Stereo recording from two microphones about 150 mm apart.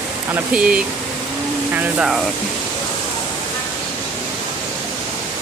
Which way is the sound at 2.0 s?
Centre (ahead or behind).